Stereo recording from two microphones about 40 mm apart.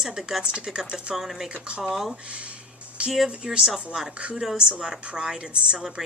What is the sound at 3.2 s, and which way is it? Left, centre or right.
Speech, centre.